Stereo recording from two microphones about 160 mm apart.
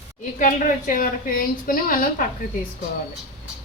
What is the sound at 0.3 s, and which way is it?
A woman's voice, 55° left (ahead or behind).